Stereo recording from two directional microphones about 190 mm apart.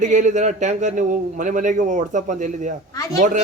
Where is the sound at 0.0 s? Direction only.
40° right (ahead or behind).